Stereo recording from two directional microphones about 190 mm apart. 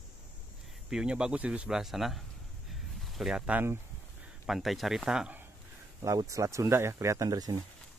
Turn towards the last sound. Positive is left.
turn(degrees=-20)  # may be behind; listen again after turning